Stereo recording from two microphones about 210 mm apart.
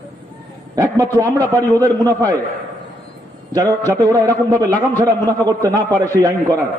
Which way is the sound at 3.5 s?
15° right (ahead or behind).